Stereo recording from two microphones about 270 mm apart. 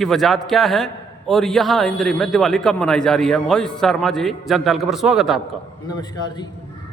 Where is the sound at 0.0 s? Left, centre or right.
Centre.